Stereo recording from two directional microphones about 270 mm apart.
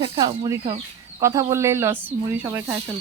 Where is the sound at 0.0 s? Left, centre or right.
Centre.